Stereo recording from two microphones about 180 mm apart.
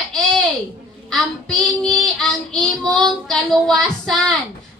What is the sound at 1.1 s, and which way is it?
A woman's voice, 5° left (ahead or behind).